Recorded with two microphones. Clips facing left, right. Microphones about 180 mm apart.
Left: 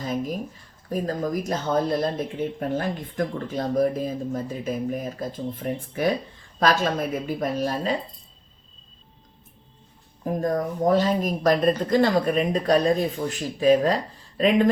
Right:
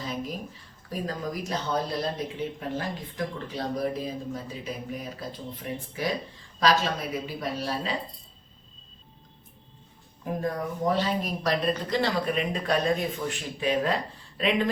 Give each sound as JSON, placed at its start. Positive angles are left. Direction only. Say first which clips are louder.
{"t": 0.0, "sound": "speech", "louder": "left 6 dB", "side_deg": 50}
{"t": 10.4, "sound": "speech", "louder": "left 5 dB", "side_deg": 45}